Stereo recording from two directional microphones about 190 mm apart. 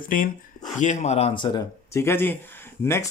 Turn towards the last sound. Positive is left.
turn(degrees=10)  # may be behind; listen again after turning